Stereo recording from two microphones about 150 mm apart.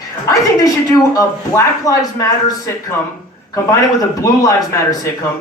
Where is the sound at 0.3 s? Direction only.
25° left (ahead or behind).